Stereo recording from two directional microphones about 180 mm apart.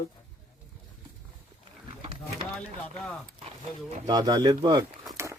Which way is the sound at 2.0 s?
30° right (ahead or behind).